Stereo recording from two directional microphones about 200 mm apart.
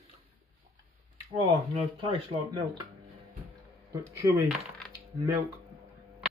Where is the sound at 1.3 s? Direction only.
25° right (ahead or behind).